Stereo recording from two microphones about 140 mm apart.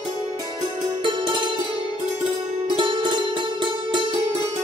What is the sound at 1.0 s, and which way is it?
Music, 35° right (ahead or behind).